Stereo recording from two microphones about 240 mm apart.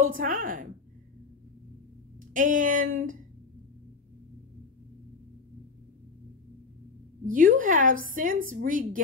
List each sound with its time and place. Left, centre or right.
0.0 s a woman's voice: right
2.3 s a woman's voice: right
7.2 s a woman's voice: right